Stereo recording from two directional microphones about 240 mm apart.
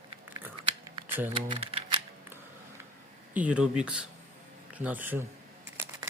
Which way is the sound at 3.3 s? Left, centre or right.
Centre.